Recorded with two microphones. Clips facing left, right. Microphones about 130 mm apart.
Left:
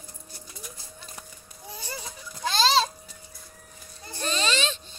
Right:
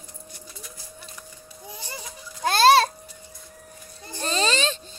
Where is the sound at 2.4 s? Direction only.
55° right (ahead or behind).